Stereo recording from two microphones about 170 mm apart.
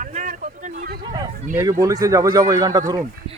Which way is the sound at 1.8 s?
20° right (ahead or behind).